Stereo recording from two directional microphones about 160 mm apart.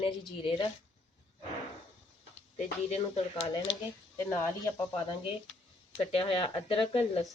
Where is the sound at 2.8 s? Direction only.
40° left (ahead or behind).